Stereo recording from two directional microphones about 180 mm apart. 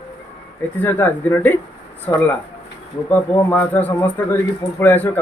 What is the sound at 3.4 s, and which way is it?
Speech, 10° left (ahead or behind).